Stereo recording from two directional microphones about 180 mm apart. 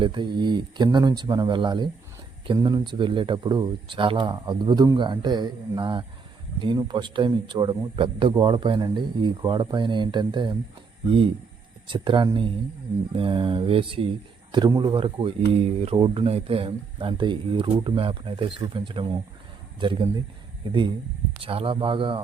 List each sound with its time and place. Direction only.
0.0 s a man's voice: 25° right (ahead or behind)
11.9 s a man's voice: 25° right (ahead or behind)